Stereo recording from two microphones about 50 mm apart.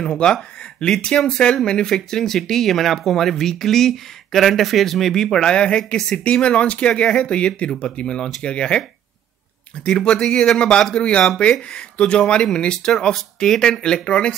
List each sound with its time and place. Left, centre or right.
0.0 s speech: centre
9.8 s speech: centre